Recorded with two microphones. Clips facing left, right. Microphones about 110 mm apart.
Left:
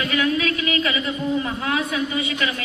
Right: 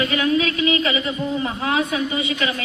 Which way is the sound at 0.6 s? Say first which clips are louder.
Right 3 dB; 20° right (ahead or behind).